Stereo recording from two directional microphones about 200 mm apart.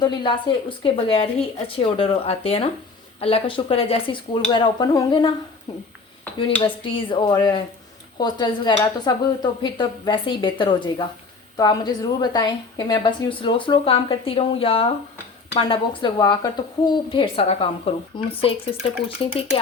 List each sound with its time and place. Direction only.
0.0 s a woman's voice: 20° left (ahead or behind)
6.8 s a woman's voice: 25° left (ahead or behind)